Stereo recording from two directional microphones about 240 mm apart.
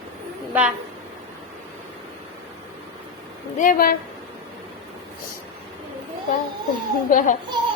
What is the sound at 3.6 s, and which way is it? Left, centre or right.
Speech, left.